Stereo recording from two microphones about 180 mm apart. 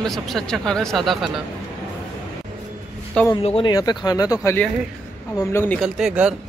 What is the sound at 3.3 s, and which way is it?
Speech, 30° left (ahead or behind).